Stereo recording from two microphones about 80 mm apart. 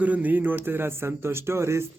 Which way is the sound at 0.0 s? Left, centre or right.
Centre.